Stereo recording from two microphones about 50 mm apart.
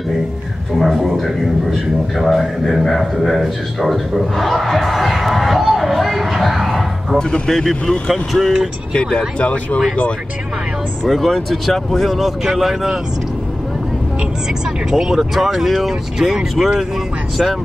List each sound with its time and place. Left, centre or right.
0.7 s a man's voice: centre
7.2 s a man's voice: centre
9.4 s speech: left
11.1 s a man's voice: centre
14.9 s speech: centre